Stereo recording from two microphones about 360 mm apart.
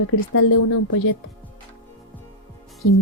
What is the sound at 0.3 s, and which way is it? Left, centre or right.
Speech, left.